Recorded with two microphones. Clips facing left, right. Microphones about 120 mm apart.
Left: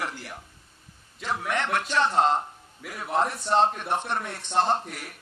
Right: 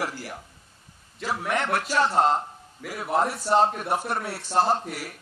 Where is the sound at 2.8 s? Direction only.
5° right (ahead or behind).